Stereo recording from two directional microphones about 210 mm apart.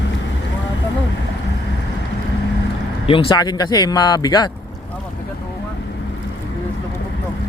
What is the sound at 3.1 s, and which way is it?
Speech, 25° left (ahead or behind).